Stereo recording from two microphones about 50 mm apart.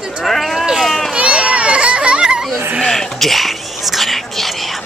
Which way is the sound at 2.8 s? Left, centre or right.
Centre.